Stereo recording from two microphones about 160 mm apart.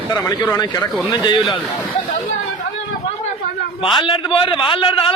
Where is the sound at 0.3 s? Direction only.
20° left (ahead or behind).